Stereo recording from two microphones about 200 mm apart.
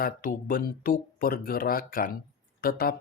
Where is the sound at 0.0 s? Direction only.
45° left (ahead or behind).